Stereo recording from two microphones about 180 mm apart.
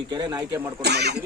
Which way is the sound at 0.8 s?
70° right (ahead or behind).